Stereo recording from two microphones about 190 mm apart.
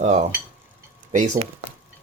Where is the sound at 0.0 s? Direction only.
35° right (ahead or behind).